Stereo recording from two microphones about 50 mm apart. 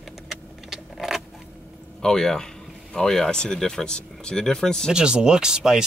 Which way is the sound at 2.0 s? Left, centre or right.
Centre.